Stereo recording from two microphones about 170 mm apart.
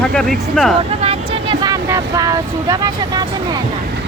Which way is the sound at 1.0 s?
35° right (ahead or behind).